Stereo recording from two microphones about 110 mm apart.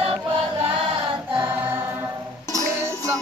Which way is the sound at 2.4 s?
30° right (ahead or behind).